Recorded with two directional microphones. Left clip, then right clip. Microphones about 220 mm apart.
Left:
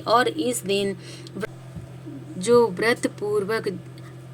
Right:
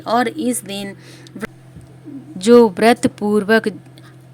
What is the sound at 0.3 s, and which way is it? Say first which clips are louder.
Speech: right 4 dB; 35° right (ahead or behind).